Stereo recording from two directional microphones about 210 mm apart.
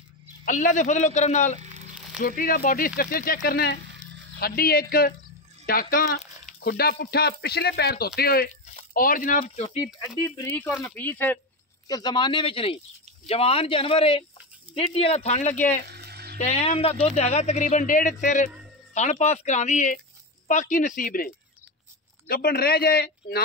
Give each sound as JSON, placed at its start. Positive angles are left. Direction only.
{"t": 0.5, "sound": "speech", "side_deg": 35}
{"t": 9.9, "sound": "speech", "side_deg": 20}
{"t": 11.9, "sound": "speech", "side_deg": 20}
{"t": 15.9, "sound": "music", "side_deg": -50}
{"t": 16.3, "sound": "speech", "side_deg": 30}
{"t": 22.3, "sound": "speech", "side_deg": 45}